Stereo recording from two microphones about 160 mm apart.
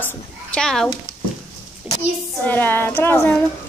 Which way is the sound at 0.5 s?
5° left (ahead or behind).